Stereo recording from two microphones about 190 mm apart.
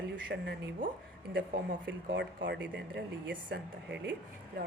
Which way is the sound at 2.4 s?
65° right (ahead or behind).